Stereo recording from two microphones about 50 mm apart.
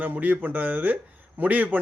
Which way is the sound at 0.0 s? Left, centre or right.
Right.